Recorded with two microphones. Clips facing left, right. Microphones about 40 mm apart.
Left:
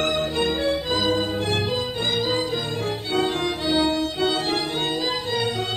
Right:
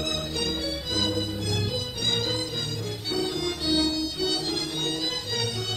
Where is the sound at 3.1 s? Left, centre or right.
Left.